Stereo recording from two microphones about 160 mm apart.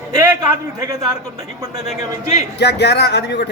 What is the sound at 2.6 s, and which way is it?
Speech, 90° left.